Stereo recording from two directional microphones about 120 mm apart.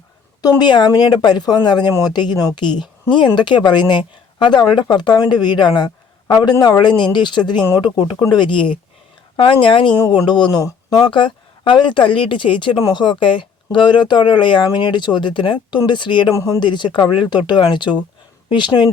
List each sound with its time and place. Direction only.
0.6 s speech: 40° left (ahead or behind)
8.1 s speech: 25° left (ahead or behind)
8.4 s speech: 45° left (ahead or behind)
10.0 s speech: 35° left (ahead or behind)
11.0 s speech: 45° left (ahead or behind)
16.3 s speech: 25° left (ahead or behind)
16.6 s speech: 40° left (ahead or behind)